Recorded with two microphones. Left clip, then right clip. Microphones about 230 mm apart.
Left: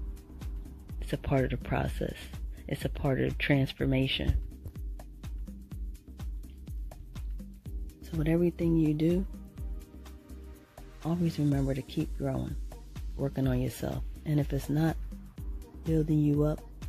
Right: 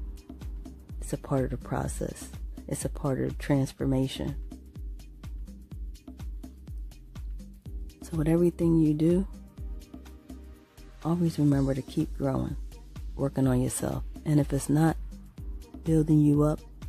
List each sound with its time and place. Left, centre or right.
1.1 s speech: centre
2.7 s speech: right
3.1 s speech: centre
8.2 s speech: centre
11.1 s speech: right
16.0 s speech: right